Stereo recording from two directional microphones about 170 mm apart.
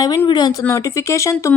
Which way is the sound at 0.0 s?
20° left (ahead or behind).